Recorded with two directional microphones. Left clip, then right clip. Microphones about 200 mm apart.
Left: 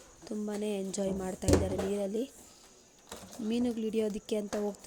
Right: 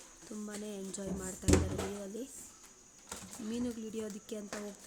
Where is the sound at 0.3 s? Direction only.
25° left (ahead or behind).